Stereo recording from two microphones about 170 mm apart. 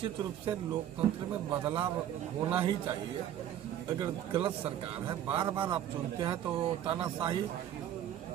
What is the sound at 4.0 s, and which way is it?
Speech, 30° right (ahead or behind).